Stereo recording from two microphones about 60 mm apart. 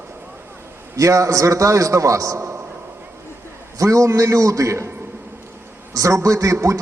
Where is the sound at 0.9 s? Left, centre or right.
Right.